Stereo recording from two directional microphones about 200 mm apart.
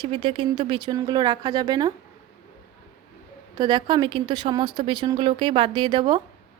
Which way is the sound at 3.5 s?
20° right (ahead or behind).